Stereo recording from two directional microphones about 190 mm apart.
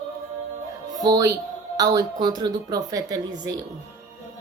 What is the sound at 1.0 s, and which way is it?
Speech, 20° right (ahead or behind).